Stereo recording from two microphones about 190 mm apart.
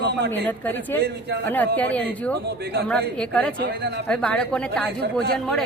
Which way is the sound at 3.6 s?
55° right (ahead or behind).